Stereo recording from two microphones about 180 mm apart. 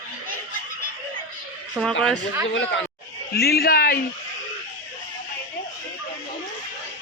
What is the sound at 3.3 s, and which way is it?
Speech, 60° left (ahead or behind).